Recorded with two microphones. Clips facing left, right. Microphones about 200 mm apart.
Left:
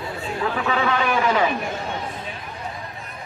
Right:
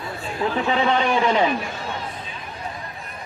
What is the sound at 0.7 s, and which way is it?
Speech, 25° right (ahead or behind).